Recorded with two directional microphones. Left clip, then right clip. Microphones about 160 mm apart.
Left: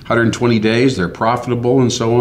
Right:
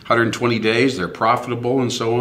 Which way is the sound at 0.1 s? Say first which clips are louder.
Left 2 dB; 20° right (ahead or behind).